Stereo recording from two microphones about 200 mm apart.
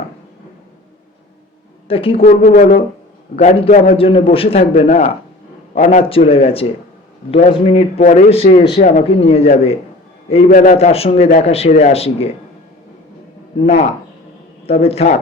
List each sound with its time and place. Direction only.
1.9 s a man's voice: 25° left (ahead or behind)
2.2 s a man's voice: 40° left (ahead or behind)
3.3 s a man's voice: 30° left (ahead or behind)
13.6 s a man's voice: 30° left (ahead or behind)